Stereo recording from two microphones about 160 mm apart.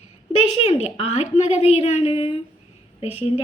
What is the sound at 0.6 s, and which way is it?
A woman's voice, 45° left (ahead or behind).